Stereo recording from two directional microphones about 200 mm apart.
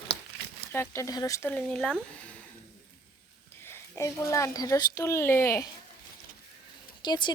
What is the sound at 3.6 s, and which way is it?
Speech, 15° left (ahead or behind).